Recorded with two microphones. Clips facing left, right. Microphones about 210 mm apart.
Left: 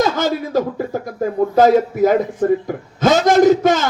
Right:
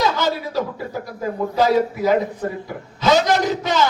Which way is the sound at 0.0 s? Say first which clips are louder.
Left 3 dB; 50° left (ahead or behind).